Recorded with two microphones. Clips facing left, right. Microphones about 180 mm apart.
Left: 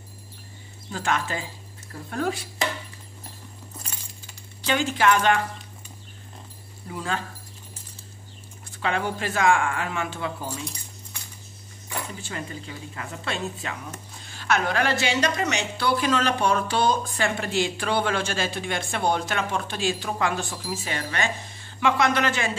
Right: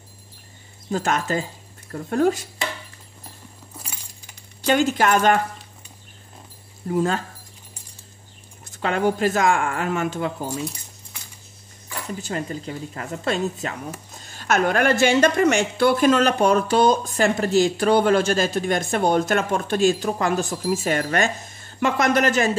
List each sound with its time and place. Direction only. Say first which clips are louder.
0.8 s speech: right 4 dB; 45° right (ahead or behind)
4.6 s a woman's voice: right 5 dB; 45° right (ahead or behind)
6.9 s a woman's voice: right 8 dB; 45° right (ahead or behind)
8.6 s a woman's voice: right 5 dB; 45° right (ahead or behind)
12.2 s a woman's voice: right 6 dB; 40° right (ahead or behind)